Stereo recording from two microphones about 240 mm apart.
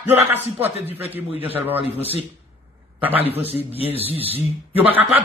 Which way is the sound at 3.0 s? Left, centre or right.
Centre.